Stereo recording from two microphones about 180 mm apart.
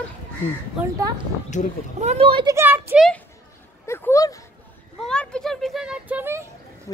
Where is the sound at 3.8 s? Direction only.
15° left (ahead or behind).